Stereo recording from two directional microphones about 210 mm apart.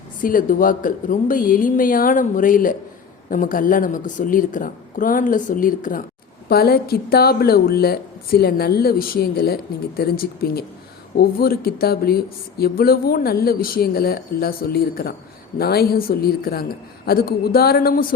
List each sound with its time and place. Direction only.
0.2 s a woman's voice: 40° left (ahead or behind)